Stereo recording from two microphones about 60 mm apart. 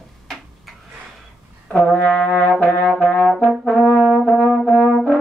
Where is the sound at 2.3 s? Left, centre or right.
Left.